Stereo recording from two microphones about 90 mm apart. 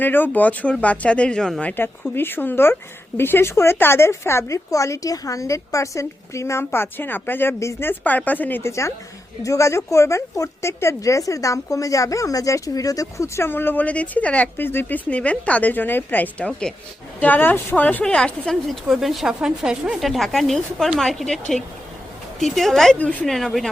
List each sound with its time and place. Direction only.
0.0 s a woman's voice: 20° left (ahead or behind)
2.1 s speech: 25° left (ahead or behind)
9.4 s a woman's voice: 35° left (ahead or behind); by 23.6 s centre (ahead or behind)